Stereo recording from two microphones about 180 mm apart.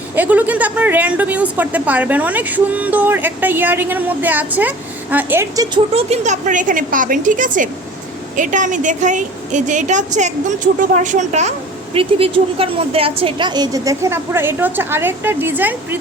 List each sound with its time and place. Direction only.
0.2 s a woman's voice: 10° right (ahead or behind)
5.7 s a woman's voice: 35° right (ahead or behind)
11.9 s a woman's voice: 30° right (ahead or behind); by 16.0 s 10° right (ahead or behind)